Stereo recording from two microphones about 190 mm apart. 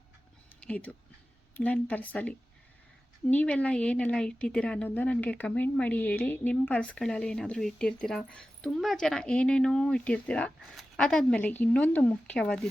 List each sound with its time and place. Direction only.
0.6 s a woman's voice: 10° left (ahead or behind)